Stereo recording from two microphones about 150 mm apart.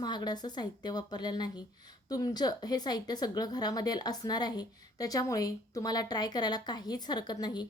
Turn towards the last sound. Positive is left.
turn(degrees=25)  # may be behind; listen again after turning